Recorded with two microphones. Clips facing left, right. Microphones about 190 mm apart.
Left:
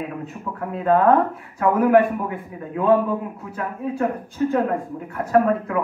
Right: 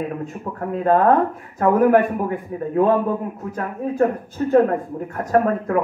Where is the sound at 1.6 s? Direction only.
40° right (ahead or behind).